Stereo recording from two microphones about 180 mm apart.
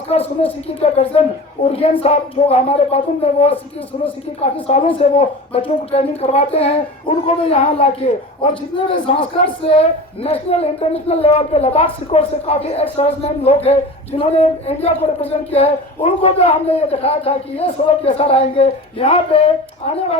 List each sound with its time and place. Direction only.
0.1 s speech: 35° left (ahead or behind)
4.6 s speech: 30° left (ahead or behind)